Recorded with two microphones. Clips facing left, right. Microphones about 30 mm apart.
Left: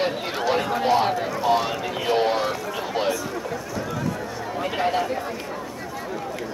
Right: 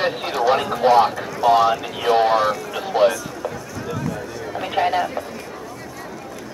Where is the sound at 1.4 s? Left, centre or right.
Centre.